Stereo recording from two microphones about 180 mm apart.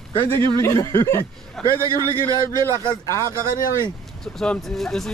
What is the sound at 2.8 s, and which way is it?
Speech, 25° left (ahead or behind).